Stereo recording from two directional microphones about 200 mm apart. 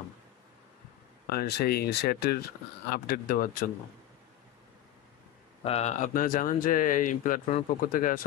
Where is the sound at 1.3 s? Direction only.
50° left (ahead or behind).